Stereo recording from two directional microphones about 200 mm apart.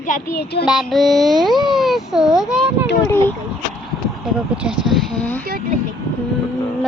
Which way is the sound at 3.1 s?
10° left (ahead or behind).